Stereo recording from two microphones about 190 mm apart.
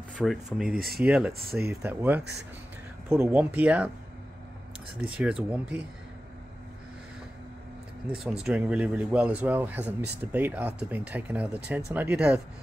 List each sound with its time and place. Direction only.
0.1 s speech: centre (ahead or behind)
0.7 s speech: 55° right (ahead or behind)
1.0 s speech: 5° right (ahead or behind)
5.0 s speech: 5° right (ahead or behind)
8.1 s speech: centre (ahead or behind)